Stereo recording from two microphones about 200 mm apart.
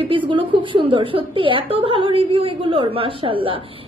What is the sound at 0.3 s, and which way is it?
A woman's voice, 25° right (ahead or behind).